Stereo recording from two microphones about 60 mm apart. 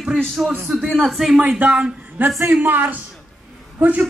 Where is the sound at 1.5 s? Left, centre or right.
Right.